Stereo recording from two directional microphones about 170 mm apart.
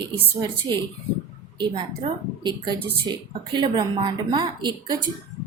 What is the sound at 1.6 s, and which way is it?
Speech, 25° right (ahead or behind).